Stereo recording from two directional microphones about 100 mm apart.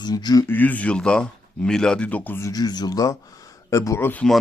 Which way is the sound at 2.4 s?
35° left (ahead or behind).